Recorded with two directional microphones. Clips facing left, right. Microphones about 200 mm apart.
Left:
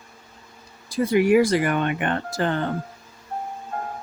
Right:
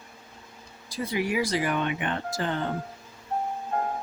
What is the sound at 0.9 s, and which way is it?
Speech, 55° left (ahead or behind).